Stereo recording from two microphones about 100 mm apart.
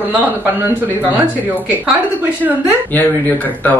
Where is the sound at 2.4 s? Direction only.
15° right (ahead or behind).